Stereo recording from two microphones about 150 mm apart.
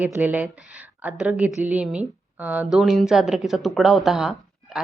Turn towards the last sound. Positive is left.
turn(degrees=-5)  # may be behind; listen again after turning